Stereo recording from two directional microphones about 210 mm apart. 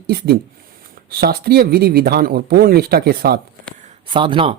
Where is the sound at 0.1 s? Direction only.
50° right (ahead or behind).